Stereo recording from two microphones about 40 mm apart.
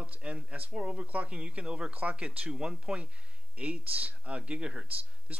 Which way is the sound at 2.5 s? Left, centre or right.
Centre.